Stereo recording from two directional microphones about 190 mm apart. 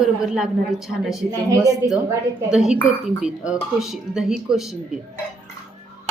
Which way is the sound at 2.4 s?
5° right (ahead or behind).